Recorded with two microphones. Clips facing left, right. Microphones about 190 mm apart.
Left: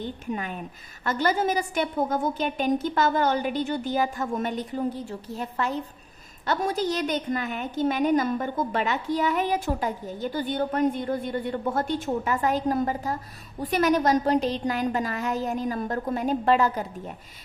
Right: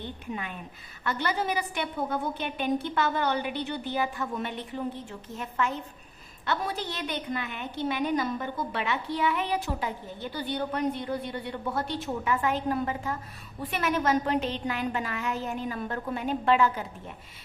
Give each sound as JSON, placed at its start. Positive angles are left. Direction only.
{"t": 0.0, "sound": "a woman's voice", "side_deg": 45}